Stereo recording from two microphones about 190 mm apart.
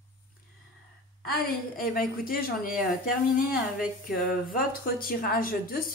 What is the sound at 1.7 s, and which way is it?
Speech, 50° left (ahead or behind).